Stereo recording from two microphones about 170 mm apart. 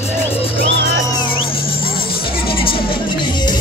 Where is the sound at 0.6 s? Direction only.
90° right.